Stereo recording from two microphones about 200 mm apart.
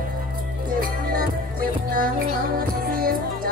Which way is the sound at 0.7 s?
45° right (ahead or behind).